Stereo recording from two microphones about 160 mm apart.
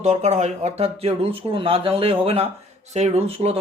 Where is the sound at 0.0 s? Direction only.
45° right (ahead or behind).